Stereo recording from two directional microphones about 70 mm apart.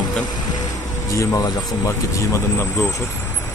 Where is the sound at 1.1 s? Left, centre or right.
Left.